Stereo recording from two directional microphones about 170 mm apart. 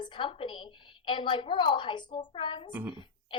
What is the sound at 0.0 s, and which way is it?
A woman's voice, 30° left (ahead or behind).